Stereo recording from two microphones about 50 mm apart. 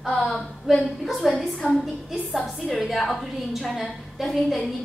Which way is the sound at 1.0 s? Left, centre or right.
Centre.